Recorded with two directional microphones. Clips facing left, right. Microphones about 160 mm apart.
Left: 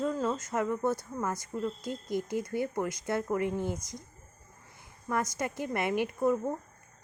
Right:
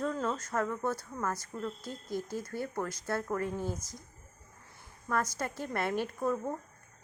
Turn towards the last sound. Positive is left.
turn(degrees=10)  # may be behind; listen again after turning